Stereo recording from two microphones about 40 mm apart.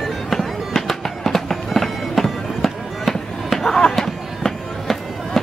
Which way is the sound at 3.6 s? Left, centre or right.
Centre.